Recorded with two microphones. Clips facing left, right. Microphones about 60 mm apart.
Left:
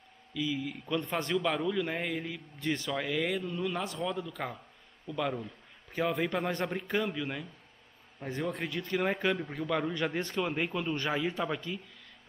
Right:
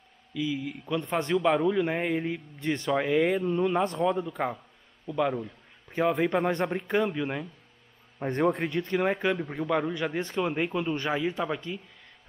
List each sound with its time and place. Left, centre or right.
0.3 s speech: centre
1.0 s a man's voice: right
8.3 s a man's voice: right
8.6 s a man's voice: right
8.9 s speech: centre